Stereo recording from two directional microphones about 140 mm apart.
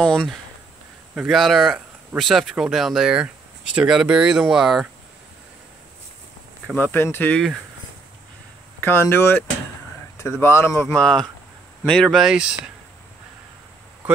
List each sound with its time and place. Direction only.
0.0 s speech: 5° left (ahead or behind)
6.8 s speech: 15° left (ahead or behind)
8.8 s speech: 15° left (ahead or behind)
10.4 s speech: 20° left (ahead or behind)
11.0 s speech: 5° left (ahead or behind)